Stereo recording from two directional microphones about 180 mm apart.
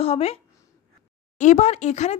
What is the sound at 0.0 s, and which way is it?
Speech, 30° left (ahead or behind).